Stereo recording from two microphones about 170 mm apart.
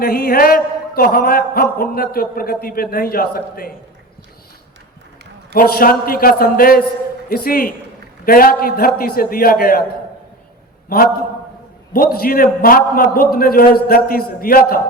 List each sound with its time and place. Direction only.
0.0 s a man's voice: 60° left (ahead or behind)
5.5 s a man's voice: 60° left (ahead or behind)
10.8 s a man's voice: 60° left (ahead or behind)